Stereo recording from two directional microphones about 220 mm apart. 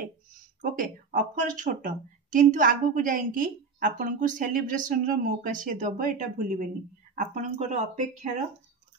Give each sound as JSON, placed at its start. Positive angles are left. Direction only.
{"t": 0.6, "sound": "speech", "side_deg": -40}